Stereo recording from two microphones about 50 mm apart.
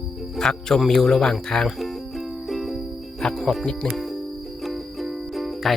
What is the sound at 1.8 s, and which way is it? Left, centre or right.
Music, centre.